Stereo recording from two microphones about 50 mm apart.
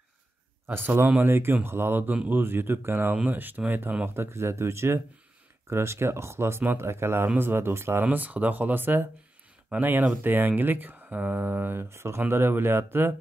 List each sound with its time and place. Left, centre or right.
0.7 s speech: right
1.3 s speech: right
3.3 s speech: right
4.1 s speech: right
8.0 s speech: right
11.8 s speech: right
12.3 s speech: right